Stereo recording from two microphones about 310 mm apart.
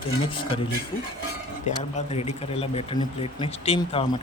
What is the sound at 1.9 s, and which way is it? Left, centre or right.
Speech, left.